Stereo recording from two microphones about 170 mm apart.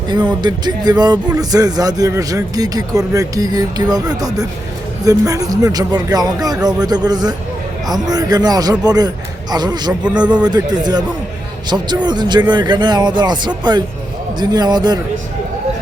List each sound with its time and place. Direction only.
0.4 s a man's voice: 25° right (ahead or behind)
10.0 s speech: 5° right (ahead or behind)
10.4 s a man's voice: 25° right (ahead or behind)
12.0 s a man's voice: 25° right (ahead or behind)